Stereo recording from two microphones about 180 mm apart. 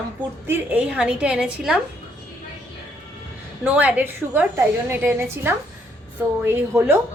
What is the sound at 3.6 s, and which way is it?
A woman's voice, 10° right (ahead or behind).